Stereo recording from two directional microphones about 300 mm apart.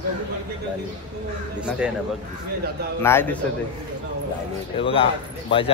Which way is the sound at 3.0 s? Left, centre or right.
Centre.